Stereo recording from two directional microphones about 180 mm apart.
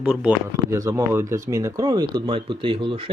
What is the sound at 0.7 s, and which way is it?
Speech, 20° right (ahead or behind).